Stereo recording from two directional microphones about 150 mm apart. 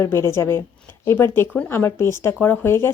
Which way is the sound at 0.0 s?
20° left (ahead or behind).